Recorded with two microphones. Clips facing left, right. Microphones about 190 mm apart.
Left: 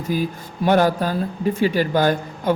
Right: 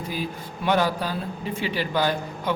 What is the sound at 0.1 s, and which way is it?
Speech, 45° left (ahead or behind).